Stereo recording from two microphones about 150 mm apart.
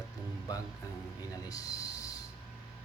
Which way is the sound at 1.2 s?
25° left (ahead or behind).